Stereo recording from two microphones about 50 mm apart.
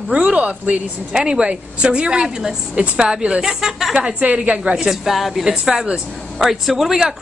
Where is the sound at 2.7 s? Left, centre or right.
Right.